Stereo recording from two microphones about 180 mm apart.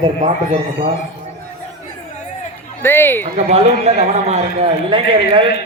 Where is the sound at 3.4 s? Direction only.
35° right (ahead or behind).